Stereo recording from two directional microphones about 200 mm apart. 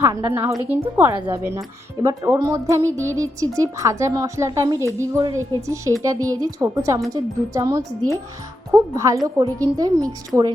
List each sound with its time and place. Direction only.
0.0 s speech: 15° right (ahead or behind)